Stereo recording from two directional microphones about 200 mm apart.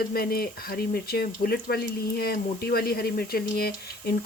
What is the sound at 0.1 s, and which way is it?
Speech, 50° left (ahead or behind).